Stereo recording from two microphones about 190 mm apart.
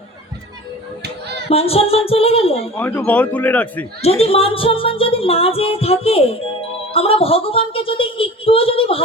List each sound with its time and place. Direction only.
1.5 s music: 30° left (ahead or behind)
2.7 s speech: 10° left (ahead or behind)
4.2 s music: 30° left (ahead or behind)
6.9 s a woman's voice: 30° left (ahead or behind)